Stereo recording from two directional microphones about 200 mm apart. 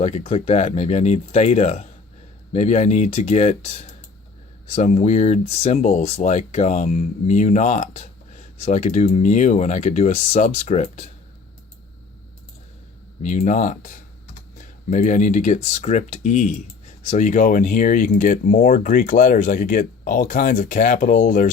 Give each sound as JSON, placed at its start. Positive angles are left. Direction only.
{"t": 0.0, "sound": "speech", "side_deg": 30}
{"t": 13.2, "sound": "speech", "side_deg": 35}